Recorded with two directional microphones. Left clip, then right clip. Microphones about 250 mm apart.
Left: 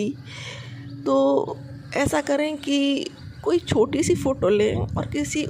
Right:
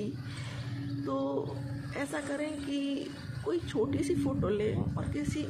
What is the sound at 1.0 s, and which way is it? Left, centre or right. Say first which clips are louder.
Speech: left 15 dB; left.